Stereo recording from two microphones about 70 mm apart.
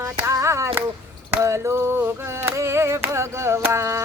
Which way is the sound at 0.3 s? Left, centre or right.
Right.